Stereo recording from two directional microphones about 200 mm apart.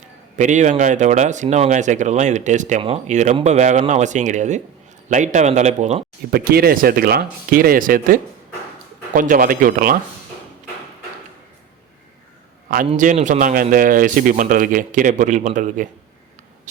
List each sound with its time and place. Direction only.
0.3 s speech: 35° right (ahead or behind)
6.3 s speech: 50° right (ahead or behind)
12.9 s speech: 35° right (ahead or behind)